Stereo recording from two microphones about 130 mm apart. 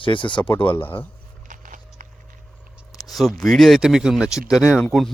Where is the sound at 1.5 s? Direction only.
85° right.